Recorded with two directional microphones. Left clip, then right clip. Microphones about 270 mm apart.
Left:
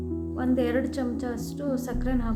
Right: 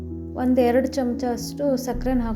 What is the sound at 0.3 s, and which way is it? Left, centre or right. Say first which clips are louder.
A woman's voice: right 7 dB; right.